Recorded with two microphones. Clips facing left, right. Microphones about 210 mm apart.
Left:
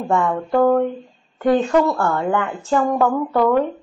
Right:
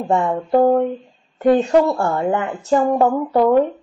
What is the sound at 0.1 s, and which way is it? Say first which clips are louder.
A woman's voice: right 2 dB; 25° right (ahead or behind).